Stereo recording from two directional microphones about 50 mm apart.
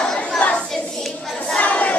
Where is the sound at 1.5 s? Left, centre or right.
Left.